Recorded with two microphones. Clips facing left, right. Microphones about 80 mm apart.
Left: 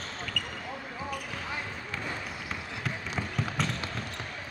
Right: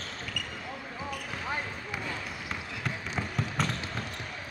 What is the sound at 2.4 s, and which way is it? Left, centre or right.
Basketball bounce, centre.